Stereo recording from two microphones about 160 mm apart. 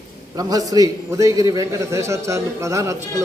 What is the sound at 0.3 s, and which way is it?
A man's voice, 25° right (ahead or behind).